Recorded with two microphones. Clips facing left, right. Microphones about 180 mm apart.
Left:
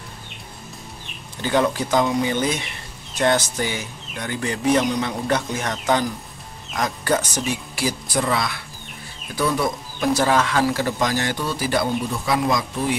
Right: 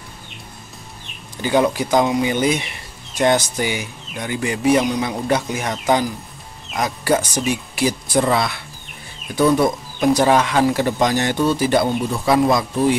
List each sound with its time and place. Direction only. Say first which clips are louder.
1.4 s speech: right 3 dB; 10° right (ahead or behind)
8.2 s speech: right 5 dB; 30° right (ahead or behind)